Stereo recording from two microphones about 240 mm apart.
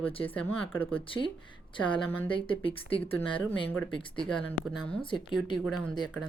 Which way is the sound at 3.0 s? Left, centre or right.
Centre.